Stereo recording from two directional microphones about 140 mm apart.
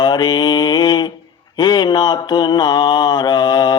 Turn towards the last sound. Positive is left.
turn(degrees=30)  # may be behind; listen again after turning